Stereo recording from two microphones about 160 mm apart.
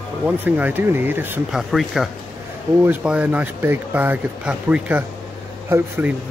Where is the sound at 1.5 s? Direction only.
5° right (ahead or behind).